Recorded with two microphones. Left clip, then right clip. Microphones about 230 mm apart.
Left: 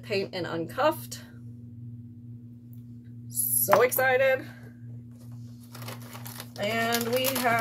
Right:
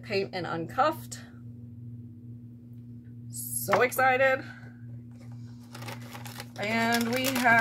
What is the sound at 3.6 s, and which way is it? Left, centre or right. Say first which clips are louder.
Speech: left 2 dB; centre.